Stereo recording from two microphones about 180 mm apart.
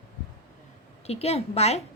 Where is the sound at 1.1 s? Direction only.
35° left (ahead or behind).